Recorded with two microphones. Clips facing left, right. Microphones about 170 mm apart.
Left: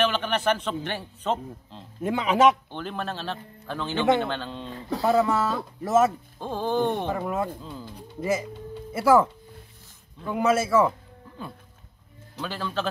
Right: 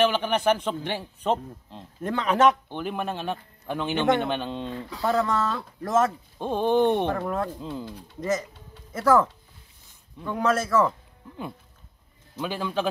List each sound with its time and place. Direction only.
0.0 s a man's voice: 10° right (ahead or behind)
2.0 s speech: 10° left (ahead or behind)
2.7 s a man's voice: 10° right (ahead or behind)
5.0 s speech: 5° left (ahead or behind)
6.4 s speech: 20° right (ahead or behind)
7.1 s speech: 5° left (ahead or behind)
7.6 s speech: 20° right (ahead or behind)
8.2 s speech: 10° left (ahead or behind)
12.4 s a man's voice: 15° right (ahead or behind)